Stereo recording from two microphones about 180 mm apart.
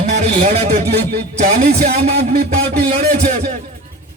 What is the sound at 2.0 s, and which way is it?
Speech, 35° right (ahead or behind).